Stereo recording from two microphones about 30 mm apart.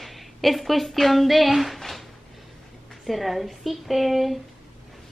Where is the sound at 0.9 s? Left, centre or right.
Centre.